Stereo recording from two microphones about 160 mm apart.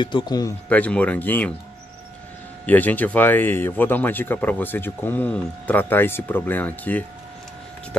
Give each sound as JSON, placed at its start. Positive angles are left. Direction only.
{"t": 0.0, "sound": "speech", "side_deg": 25}
{"t": 0.7, "sound": "speech", "side_deg": 10}
{"t": 2.6, "sound": "speech", "side_deg": 10}